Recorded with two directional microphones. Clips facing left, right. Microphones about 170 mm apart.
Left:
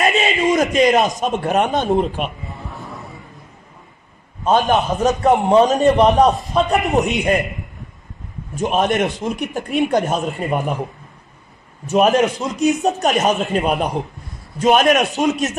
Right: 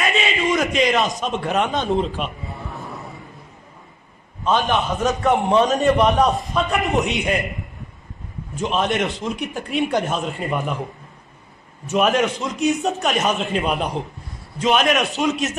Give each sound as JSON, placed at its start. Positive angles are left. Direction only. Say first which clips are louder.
{"t": 0.0, "sound": "a man's voice", "louder": "left 4 dB", "side_deg": 40}
{"t": 4.5, "sound": "a man's voice", "louder": "left 4 dB", "side_deg": 45}
{"t": 8.5, "sound": "a man's voice", "louder": "left 4 dB", "side_deg": 50}
{"t": 11.9, "sound": "a man's voice", "louder": "left 4 dB", "side_deg": 40}